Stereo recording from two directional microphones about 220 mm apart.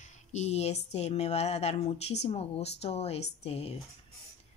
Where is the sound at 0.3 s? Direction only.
30° left (ahead or behind).